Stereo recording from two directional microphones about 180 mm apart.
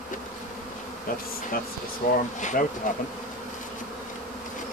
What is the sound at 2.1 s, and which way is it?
Speech, 45° left (ahead or behind).